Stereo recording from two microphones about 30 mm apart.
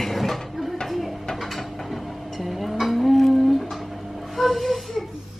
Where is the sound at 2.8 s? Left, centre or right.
Centre.